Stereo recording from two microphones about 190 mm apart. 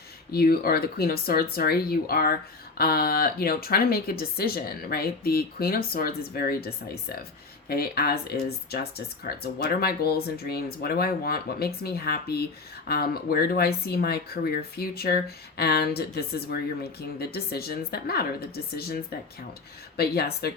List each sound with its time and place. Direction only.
0.3 s speech: 55° left (ahead or behind)
20.0 s speech: 55° left (ahead or behind)